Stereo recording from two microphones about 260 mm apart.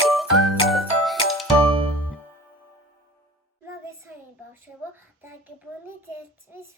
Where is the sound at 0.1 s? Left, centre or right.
Centre.